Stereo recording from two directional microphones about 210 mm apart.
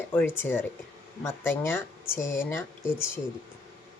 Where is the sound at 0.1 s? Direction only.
10° left (ahead or behind).